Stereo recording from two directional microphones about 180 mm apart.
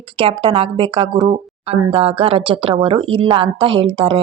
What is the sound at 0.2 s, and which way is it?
Speech, 30° right (ahead or behind).